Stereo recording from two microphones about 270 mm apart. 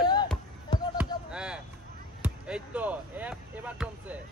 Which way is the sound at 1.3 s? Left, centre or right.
Centre.